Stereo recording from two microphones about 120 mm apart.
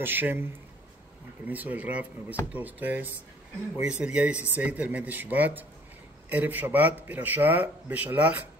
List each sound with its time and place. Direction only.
0.0 s a man's voice: 15° right (ahead or behind)
1.5 s a man's voice: 15° right (ahead or behind)